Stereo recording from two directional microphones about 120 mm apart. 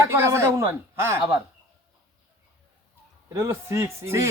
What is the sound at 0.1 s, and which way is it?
Speech, 20° right (ahead or behind).